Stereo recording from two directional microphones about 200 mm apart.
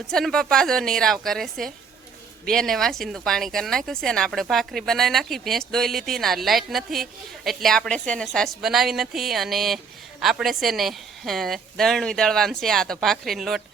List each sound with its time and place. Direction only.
0.1 s speech: 5° left (ahead or behind)